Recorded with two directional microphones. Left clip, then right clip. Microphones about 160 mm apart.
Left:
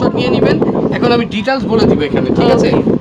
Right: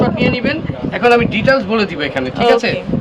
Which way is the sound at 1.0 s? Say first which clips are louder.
Right 2 dB; 40° left (ahead or behind).